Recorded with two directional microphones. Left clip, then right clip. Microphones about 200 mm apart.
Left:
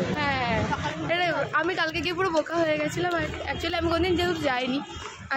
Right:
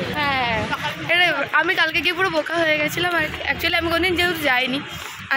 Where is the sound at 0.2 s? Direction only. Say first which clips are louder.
Right 7 dB; 25° right (ahead or behind).